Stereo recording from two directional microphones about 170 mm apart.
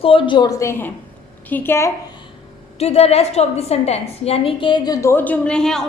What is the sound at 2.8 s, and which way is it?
A woman's voice, 40° left (ahead or behind).